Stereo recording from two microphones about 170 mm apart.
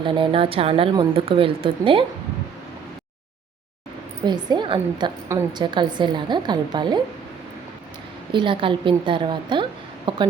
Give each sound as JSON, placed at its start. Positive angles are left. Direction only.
{"t": 0.0, "sound": "a woman's voice", "side_deg": -30}
{"t": 4.3, "sound": "speech", "side_deg": -25}
{"t": 8.3, "sound": "speech", "side_deg": -30}